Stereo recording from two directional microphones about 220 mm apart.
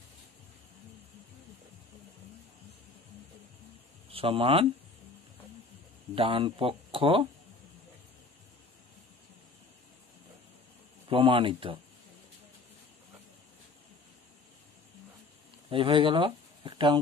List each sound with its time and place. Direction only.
4.1 s speech: 25° right (ahead or behind)
6.1 s speech: 25° right (ahead or behind)
11.1 s speech: 25° right (ahead or behind)
15.7 s speech: 25° right (ahead or behind)